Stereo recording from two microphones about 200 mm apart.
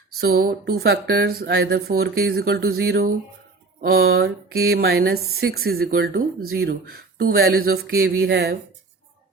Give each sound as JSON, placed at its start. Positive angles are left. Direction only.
{"t": 0.2, "sound": "speech", "side_deg": -50}
{"t": 4.1, "sound": "speech", "side_deg": -50}